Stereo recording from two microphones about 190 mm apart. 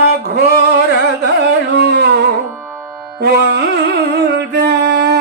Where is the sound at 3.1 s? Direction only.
55° right (ahead or behind).